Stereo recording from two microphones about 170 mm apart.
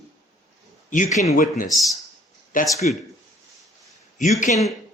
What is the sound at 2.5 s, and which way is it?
Speech, 55° left (ahead or behind).